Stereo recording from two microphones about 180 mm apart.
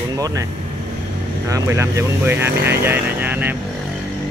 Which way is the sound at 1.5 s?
15° right (ahead or behind).